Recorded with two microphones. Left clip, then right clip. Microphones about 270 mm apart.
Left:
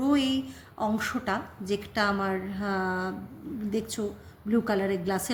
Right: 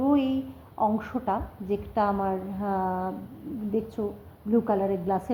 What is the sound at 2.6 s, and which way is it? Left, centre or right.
Speech, left.